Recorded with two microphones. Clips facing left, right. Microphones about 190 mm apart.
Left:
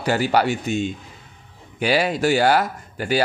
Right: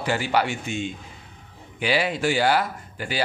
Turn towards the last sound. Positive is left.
turn(degrees=45)  # may be behind; listen again after turning